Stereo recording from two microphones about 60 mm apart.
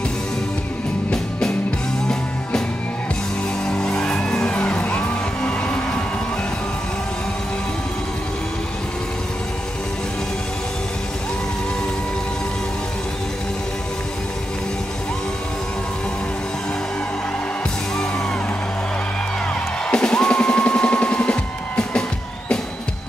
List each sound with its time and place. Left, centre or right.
3.6 s music: centre
4.6 s music: left
19.9 s music: centre